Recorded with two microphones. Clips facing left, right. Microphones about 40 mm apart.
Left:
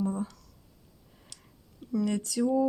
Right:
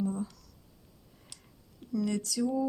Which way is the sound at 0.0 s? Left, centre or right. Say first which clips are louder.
Left 2 dB; left.